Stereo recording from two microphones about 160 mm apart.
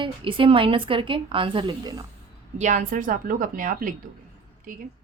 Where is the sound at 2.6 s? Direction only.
50° right (ahead or behind).